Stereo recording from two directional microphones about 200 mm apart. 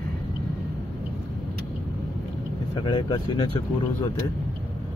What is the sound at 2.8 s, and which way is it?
Speech, 20° left (ahead or behind).